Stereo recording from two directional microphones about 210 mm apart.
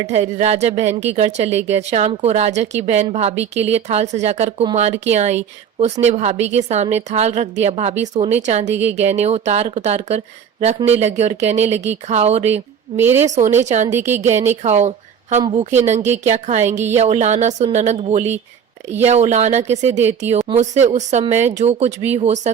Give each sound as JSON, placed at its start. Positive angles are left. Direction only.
{"t": 0.1, "sound": "a woman's voice", "side_deg": -30}
{"t": 13.0, "sound": "a woman's voice", "side_deg": -10}
{"t": 13.7, "sound": "a woman's voice", "side_deg": -35}